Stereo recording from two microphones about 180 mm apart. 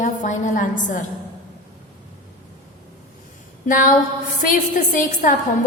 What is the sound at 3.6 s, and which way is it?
A woman's voice, 50° left (ahead or behind).